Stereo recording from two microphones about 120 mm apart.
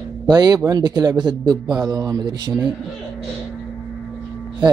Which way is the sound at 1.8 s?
30° right (ahead or behind).